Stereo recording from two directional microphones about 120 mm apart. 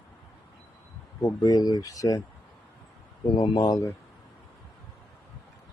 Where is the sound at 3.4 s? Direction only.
35° left (ahead or behind).